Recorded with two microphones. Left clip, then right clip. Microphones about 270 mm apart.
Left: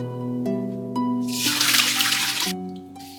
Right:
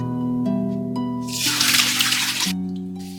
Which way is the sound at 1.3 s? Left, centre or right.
Centre.